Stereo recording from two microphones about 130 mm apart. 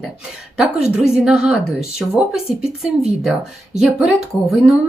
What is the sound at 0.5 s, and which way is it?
Speech, 5° right (ahead or behind).